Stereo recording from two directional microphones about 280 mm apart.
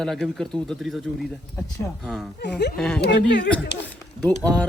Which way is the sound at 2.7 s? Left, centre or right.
Centre.